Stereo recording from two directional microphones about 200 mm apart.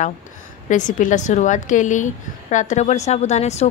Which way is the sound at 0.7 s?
40° left (ahead or behind).